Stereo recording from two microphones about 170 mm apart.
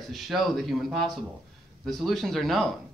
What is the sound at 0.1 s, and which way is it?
Speech, centre (ahead or behind).